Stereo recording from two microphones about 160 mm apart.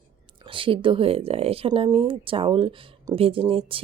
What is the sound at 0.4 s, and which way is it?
Speech, 35° right (ahead or behind).